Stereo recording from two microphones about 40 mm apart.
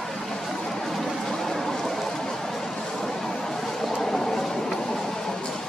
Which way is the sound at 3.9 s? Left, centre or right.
Centre.